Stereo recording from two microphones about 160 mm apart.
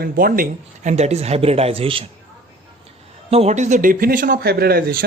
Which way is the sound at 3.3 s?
40° right (ahead or behind).